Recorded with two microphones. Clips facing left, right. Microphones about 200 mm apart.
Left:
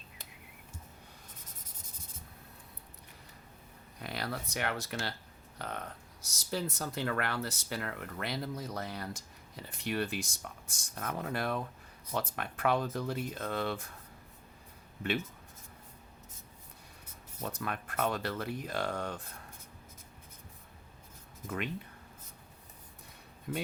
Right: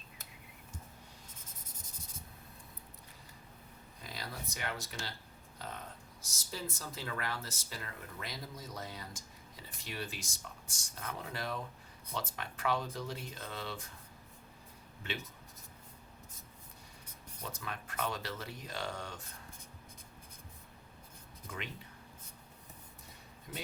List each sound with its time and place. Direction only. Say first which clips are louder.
4.0 s speech: left 7 dB; 65° left (ahead or behind)
17.4 s speech: left 6 dB; 55° left (ahead or behind)
21.5 s speech: left 8 dB; 55° left (ahead or behind)
23.5 s speech: left 8 dB; 55° left (ahead or behind)